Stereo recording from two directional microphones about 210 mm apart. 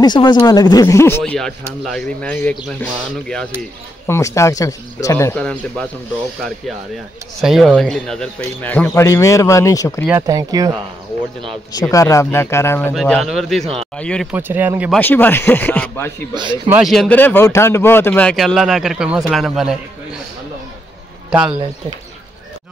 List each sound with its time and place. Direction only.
0.0 s a man's voice: 20° left (ahead or behind); by 5.9 s 5° left (ahead or behind)
7.3 s a man's voice: centre (ahead or behind)
10.0 s speech: 15° right (ahead or behind)
11.7 s a man's voice: 15° left (ahead or behind)
12.9 s speech: centre (ahead or behind)
14.3 s speech: 10° right (ahead or behind)
15.0 s a man's voice: 10° left (ahead or behind)
16.6 s speech: 10° right (ahead or behind)
16.9 s speech: 5° left (ahead or behind)